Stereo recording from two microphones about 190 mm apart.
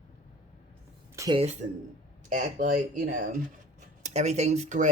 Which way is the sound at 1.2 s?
20° right (ahead or behind).